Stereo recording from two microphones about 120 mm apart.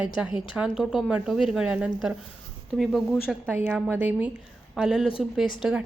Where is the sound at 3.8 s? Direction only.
15° right (ahead or behind).